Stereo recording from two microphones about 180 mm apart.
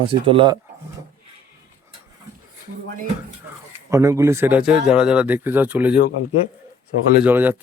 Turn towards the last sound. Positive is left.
turn(degrees=-10)  # may be behind; listen again after turning